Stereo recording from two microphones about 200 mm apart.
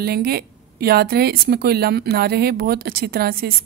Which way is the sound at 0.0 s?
50° right (ahead or behind).